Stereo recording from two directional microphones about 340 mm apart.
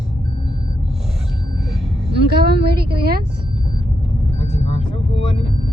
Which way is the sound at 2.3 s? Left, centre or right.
Right.